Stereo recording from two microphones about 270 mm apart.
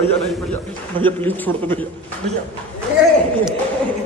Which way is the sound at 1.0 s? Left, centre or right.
Centre.